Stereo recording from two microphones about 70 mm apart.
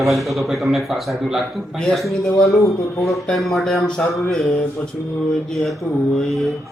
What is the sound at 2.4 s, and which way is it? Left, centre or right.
Speech, left.